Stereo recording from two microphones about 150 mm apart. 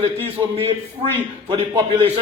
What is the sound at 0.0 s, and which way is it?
Speech, 40° right (ahead or behind).